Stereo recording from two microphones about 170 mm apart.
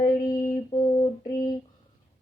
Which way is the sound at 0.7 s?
30° left (ahead or behind).